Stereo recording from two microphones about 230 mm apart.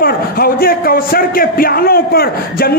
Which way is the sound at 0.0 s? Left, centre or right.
Left.